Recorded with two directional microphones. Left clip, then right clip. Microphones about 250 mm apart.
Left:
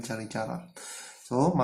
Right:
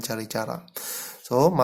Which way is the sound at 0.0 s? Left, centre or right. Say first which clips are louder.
Right 5 dB; right.